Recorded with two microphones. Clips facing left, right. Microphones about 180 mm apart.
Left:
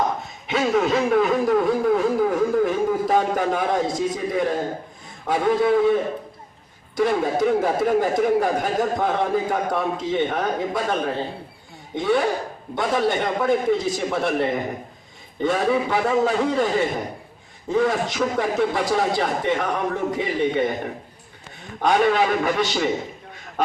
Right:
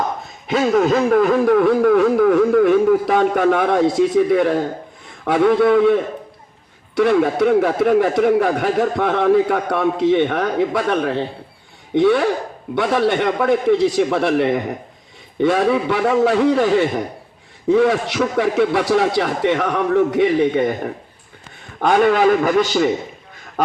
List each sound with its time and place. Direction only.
0.4 s a sound: 40° right (ahead or behind); by 4.6 s 65° right (ahead or behind)
5.2 s a man's voice: 70° right (ahead or behind)
21.8 s a man's voice: 50° right (ahead or behind)